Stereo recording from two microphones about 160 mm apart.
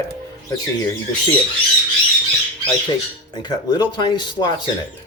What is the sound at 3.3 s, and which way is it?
Speech, 25° left (ahead or behind).